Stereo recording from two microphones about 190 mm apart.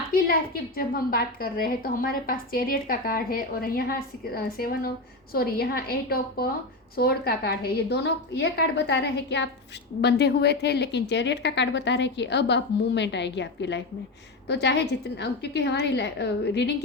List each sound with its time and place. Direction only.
0.1 s a woman's voice: 50° left (ahead or behind)